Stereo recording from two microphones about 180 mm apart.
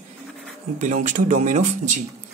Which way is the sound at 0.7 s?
40° right (ahead or behind).